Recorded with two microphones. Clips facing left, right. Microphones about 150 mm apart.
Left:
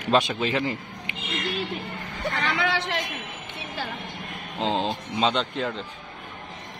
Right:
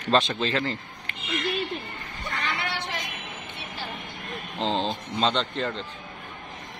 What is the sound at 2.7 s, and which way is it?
Speech, 90° left.